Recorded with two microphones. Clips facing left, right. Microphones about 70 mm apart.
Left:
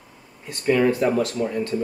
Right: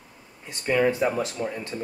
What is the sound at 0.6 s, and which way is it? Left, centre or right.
Speech, centre.